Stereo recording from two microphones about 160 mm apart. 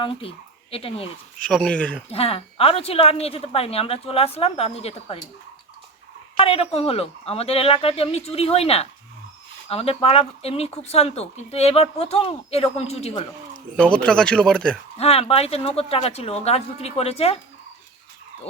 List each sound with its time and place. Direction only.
0.0 s speech: 35° left (ahead or behind)
1.4 s speech: 5° left (ahead or behind)
2.0 s speech: 40° left (ahead or behind)
6.3 s speech: 35° left (ahead or behind)
13.7 s speech: 5° left (ahead or behind)
14.9 s speech: 40° left (ahead or behind)